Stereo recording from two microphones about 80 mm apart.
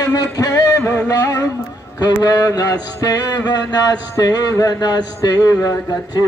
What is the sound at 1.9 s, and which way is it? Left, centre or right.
A man's voice, left.